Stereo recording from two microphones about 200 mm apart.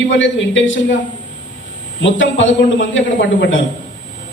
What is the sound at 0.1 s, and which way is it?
Speech, 70° left (ahead or behind).